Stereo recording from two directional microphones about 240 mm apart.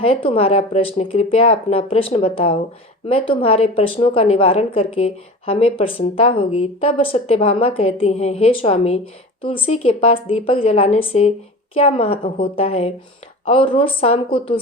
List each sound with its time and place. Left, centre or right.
0.0 s a woman's voice: left